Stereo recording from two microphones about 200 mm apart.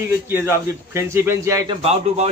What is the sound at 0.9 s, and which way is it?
Speech, 10° right (ahead or behind).